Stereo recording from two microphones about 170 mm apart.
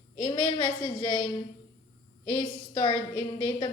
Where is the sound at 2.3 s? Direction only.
25° left (ahead or behind).